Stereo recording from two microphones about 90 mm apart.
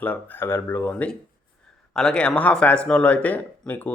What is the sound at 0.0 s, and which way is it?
Speech, 20° left (ahead or behind).